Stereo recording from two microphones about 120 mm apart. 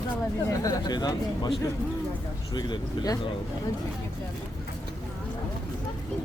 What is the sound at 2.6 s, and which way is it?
Speech, 35° left (ahead or behind).